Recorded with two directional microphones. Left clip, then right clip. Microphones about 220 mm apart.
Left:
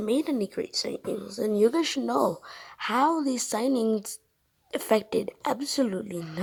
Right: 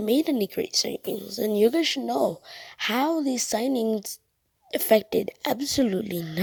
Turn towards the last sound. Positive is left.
turn(degrees=-40)  # may be behind; listen again after turning